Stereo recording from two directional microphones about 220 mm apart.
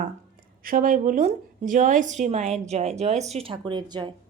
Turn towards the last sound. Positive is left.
turn(degrees=-20)  # may be behind; listen again after turning